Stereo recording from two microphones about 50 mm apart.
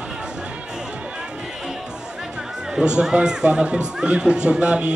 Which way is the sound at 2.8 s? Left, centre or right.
Centre.